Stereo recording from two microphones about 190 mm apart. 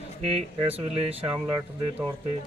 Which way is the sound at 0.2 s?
35° right (ahead or behind).